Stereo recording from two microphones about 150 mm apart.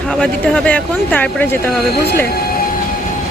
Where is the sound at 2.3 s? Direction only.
90° left.